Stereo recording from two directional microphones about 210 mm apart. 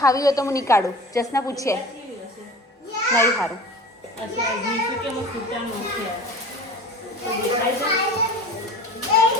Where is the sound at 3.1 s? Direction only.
10° left (ahead or behind).